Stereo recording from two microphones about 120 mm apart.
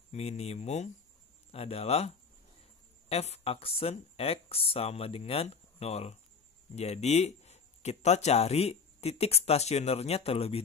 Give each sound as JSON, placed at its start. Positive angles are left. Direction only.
{"t": 0.1, "sound": "speech", "side_deg": 60}